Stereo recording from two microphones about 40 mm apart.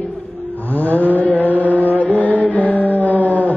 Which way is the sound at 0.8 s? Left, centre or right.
Left.